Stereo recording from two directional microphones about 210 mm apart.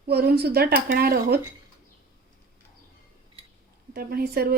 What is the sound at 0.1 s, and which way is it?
Speech, 50° right (ahead or behind).